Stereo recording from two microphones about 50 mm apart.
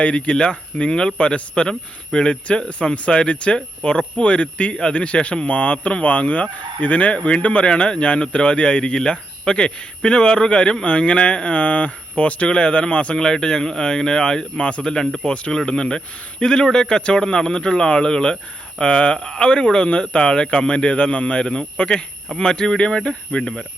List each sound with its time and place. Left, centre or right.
0.0 s speech: left
13.2 s speech: centre
15.0 s speech: centre
15.3 s speech: centre